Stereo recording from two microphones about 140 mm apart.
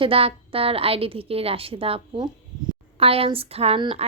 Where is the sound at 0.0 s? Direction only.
40° right (ahead or behind).